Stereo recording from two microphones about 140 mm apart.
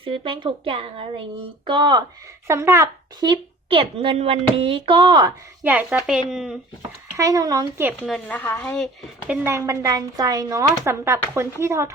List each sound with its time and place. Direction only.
0.0 s speech: 40° right (ahead or behind)
2.5 s speech: 20° right (ahead or behind)
3.2 s speech: 40° right (ahead or behind)
5.6 s a woman's voice: 10° right (ahead or behind)
7.2 s speech: 25° right (ahead or behind)
8.0 s speech: centre (ahead or behind)
8.4 s a woman's voice: 15° left (ahead or behind)
8.7 s speech: 5° left (ahead or behind)
9.2 s a woman's voice: 10° right (ahead or behind)
9.5 s speech: 20° right (ahead or behind)